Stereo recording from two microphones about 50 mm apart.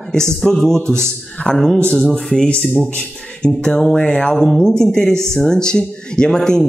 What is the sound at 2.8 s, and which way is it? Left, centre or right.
Speech, centre.